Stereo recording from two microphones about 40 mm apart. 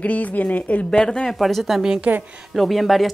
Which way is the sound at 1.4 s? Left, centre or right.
Centre.